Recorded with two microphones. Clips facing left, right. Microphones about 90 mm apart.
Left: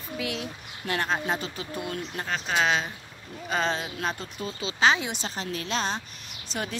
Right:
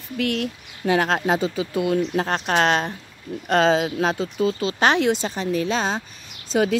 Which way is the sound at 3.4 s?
80° right.